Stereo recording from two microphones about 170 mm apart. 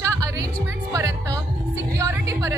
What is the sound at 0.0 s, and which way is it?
Music, 20° right (ahead or behind).